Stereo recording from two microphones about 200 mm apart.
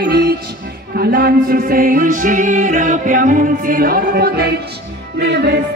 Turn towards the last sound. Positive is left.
turn(degrees=-55)  # may be behind; listen again after turning